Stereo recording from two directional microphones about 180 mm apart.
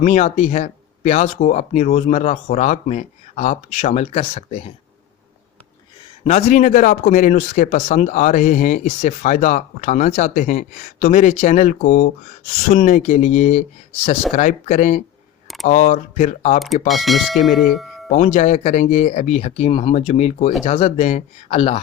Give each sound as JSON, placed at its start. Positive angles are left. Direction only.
{"t": 0.0, "sound": "speech", "side_deg": 40}
{"t": 6.2, "sound": "speech", "side_deg": 40}
{"t": 16.9, "sound": "speech", "side_deg": 0}
{"t": 18.1, "sound": "speech", "side_deg": 40}